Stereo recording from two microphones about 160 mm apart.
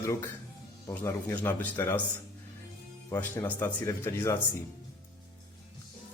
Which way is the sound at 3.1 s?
15° left (ahead or behind).